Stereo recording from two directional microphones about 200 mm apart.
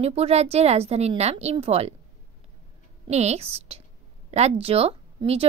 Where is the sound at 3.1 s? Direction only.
35° right (ahead or behind).